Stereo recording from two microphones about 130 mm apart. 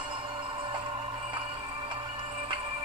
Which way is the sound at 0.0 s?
40° right (ahead or behind).